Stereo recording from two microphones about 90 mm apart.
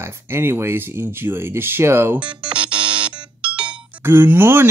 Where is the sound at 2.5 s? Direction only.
65° right (ahead or behind).